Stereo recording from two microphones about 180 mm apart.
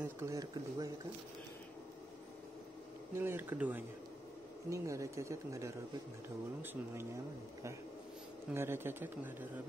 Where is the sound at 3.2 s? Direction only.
10° right (ahead or behind).